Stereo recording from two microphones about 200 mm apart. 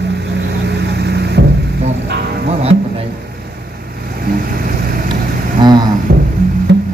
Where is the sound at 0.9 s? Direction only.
55° right (ahead or behind).